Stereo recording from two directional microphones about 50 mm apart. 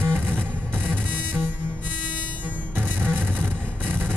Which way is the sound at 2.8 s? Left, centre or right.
Right.